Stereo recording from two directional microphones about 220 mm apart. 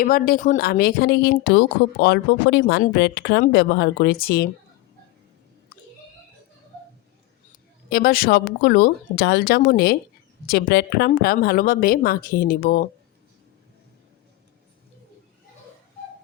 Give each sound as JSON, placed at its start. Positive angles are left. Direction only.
{"t": 0.0, "sound": "a woman's voice", "side_deg": 40}
{"t": 7.9, "sound": "a woman's voice", "side_deg": 45}